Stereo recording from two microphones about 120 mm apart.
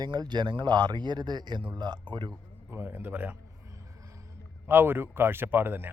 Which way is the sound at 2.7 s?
20° right (ahead or behind).